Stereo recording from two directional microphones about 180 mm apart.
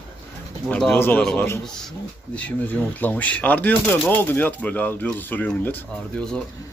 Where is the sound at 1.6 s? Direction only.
5° left (ahead or behind).